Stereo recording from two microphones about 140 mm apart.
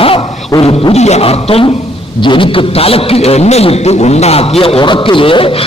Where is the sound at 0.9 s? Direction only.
50° left (ahead or behind).